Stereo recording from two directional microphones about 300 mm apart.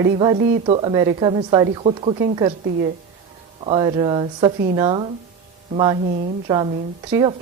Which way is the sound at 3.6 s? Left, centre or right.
Centre.